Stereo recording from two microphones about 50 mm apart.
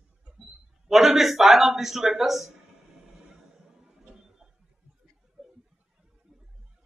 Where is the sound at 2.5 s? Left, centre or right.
Centre.